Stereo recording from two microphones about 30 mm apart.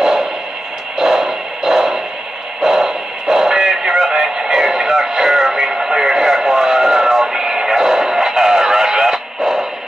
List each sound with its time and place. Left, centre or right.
0.0 s a sound: right
3.8 s music: centre
4.5 s radio: centre
7.3 s radio: centre